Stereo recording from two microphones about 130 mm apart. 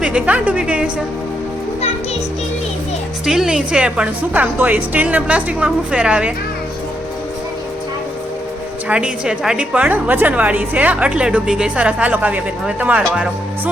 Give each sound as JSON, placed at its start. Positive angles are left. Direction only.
{"t": 0.0, "sound": "a woman's voice", "side_deg": -10}
{"t": 3.2, "sound": "a woman's voice", "side_deg": -5}
{"t": 8.9, "sound": "a woman's voice", "side_deg": -5}